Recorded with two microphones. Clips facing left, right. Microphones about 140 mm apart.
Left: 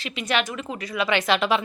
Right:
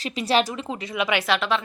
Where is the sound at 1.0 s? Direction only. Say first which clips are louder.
Left 2 dB; 5° right (ahead or behind).